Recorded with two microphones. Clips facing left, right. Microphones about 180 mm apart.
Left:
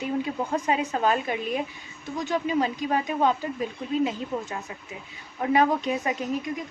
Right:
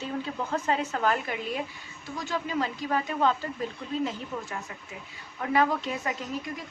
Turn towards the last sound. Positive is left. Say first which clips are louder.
# left 6 dB
turn(degrees=20)  # may be behind; listen again after turning